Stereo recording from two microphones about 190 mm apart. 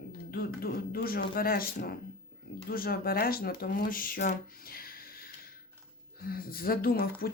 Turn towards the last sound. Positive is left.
turn(degrees=50)  # may be behind; listen again after turning